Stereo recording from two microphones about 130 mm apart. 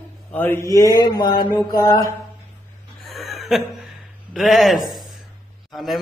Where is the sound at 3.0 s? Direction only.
Centre (ahead or behind).